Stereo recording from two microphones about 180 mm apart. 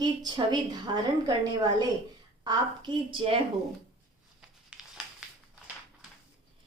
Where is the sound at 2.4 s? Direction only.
25° right (ahead or behind).